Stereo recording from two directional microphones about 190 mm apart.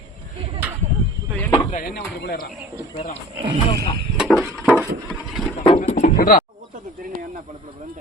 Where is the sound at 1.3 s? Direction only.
10° left (ahead or behind).